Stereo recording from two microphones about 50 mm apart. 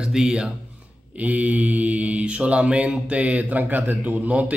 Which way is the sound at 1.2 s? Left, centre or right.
Right.